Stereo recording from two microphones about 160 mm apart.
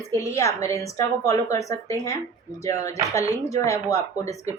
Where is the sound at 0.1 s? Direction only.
20° left (ahead or behind).